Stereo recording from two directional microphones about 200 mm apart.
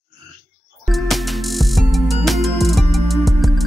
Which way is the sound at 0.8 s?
Centre (ahead or behind).